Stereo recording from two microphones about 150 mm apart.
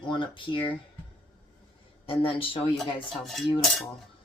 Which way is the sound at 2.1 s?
40° left (ahead or behind).